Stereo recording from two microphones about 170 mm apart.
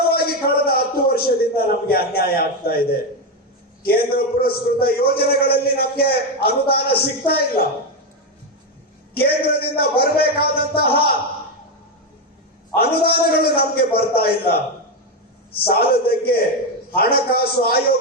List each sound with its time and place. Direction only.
0.1 s a man's voice: 65° left (ahead or behind)
9.1 s a man's voice: 65° left (ahead or behind)
12.7 s a man's voice: 65° left (ahead or behind)